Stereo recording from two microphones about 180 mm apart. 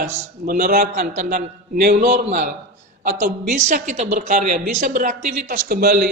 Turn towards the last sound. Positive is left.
turn(degrees=-55)  # may be behind; listen again after turning